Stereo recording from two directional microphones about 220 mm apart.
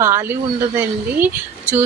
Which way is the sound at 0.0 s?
10° right (ahead or behind).